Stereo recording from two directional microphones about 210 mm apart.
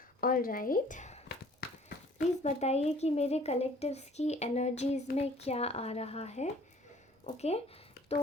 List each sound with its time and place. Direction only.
0.2 s a woman's voice: 40° left (ahead or behind)